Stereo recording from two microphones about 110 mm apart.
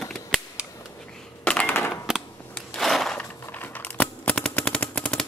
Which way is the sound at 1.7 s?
25° left (ahead or behind).